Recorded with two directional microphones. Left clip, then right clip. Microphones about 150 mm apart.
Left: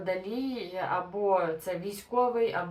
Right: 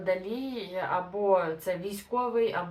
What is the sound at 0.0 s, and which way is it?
Speech, 20° right (ahead or behind).